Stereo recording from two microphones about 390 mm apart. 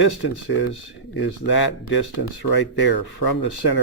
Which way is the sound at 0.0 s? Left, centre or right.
Left.